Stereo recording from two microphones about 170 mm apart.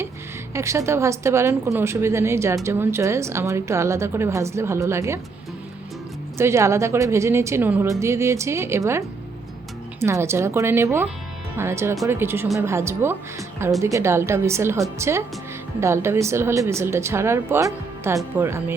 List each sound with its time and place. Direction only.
0.5 s a woman's voice: 15° right (ahead or behind)
6.3 s a woman's voice: 15° right (ahead or behind)